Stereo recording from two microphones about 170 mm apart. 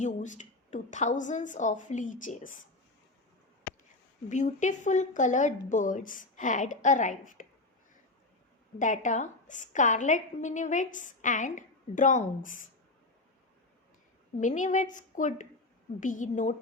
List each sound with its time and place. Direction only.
0.0 s a woman's voice: 45° left (ahead or behind)
4.3 s a woman's voice: 45° left (ahead or behind)
8.8 s a woman's voice: 45° left (ahead or behind)
14.3 s a woman's voice: 45° left (ahead or behind)